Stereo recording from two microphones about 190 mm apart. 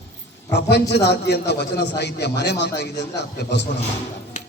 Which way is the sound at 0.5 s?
60° left (ahead or behind).